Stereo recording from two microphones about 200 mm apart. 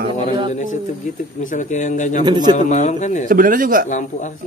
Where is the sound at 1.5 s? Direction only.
40° left (ahead or behind).